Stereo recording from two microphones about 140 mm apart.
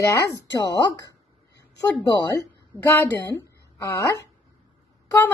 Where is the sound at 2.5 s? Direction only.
15° left (ahead or behind).